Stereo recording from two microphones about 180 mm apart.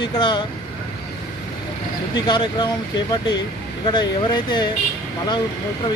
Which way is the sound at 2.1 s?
25° left (ahead or behind).